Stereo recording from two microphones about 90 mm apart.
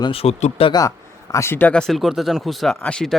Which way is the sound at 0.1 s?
90° left.